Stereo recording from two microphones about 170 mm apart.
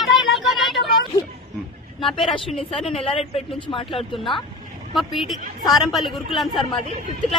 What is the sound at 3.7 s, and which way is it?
Speech, 30° left (ahead or behind).